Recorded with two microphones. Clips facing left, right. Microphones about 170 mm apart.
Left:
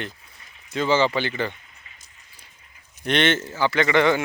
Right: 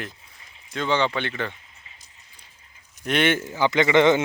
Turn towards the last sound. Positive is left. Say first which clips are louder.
# right 2 dB
turn(degrees=-20)  # may be behind; listen again after turning